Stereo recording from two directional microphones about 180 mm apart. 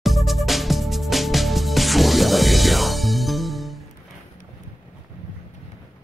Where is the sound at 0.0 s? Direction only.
Centre (ahead or behind).